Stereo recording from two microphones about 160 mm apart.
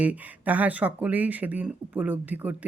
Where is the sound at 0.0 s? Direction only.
10° right (ahead or behind).